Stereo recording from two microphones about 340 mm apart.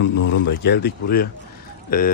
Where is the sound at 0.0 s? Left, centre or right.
Left.